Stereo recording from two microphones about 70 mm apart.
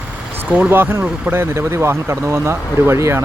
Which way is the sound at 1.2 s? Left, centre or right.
Right.